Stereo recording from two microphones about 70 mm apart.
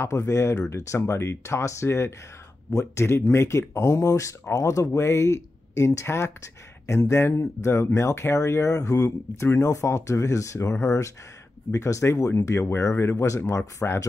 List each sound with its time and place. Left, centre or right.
0.0 s speech: left